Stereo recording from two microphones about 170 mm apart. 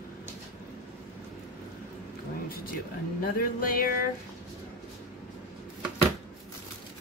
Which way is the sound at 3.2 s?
60° left (ahead or behind).